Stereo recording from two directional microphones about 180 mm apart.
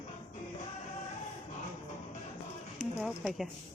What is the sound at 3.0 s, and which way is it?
Speech, centre (ahead or behind).